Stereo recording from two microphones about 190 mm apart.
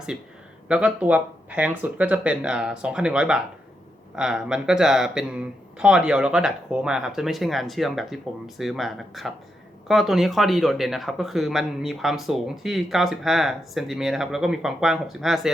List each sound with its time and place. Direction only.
0.7 s speech: 5° right (ahead or behind)